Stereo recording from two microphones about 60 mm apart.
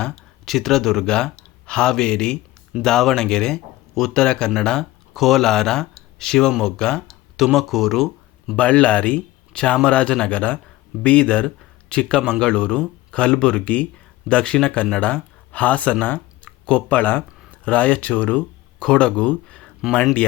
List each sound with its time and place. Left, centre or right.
0.4 s speech: centre
7.3 s speech: centre
8.5 s speech: left